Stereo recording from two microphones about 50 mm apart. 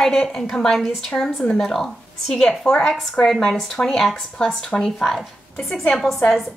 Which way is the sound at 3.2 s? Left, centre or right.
Left.